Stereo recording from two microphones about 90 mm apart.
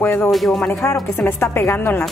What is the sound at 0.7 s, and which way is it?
A woman's voice, 30° left (ahead or behind).